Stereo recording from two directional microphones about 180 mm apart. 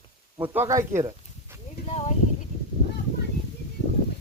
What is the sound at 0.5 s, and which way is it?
Speech, 15° right (ahead or behind).